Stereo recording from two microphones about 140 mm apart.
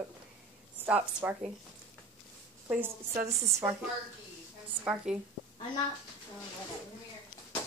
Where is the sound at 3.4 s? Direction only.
20° right (ahead or behind).